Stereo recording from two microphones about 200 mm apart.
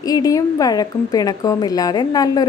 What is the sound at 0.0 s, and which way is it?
A woman's voice, 20° left (ahead or behind).